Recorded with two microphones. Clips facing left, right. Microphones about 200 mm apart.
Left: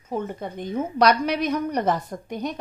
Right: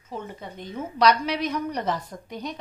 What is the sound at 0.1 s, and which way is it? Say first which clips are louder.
A woman's voice: left 7 dB; 50° left (ahead or behind).